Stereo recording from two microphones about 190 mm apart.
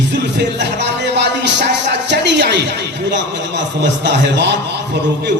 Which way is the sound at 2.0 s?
65° right (ahead or behind).